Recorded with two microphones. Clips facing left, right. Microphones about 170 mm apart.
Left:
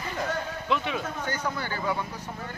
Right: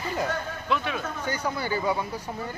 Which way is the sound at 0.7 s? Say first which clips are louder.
Even; 20° left (ahead or behind).